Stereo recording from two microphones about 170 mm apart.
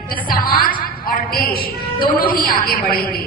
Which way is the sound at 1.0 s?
60° left (ahead or behind).